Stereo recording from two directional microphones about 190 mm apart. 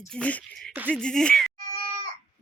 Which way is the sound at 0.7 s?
10° right (ahead or behind).